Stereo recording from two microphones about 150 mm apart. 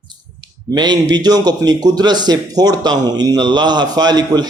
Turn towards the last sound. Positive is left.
turn(degrees=-30)  # may be behind; listen again after turning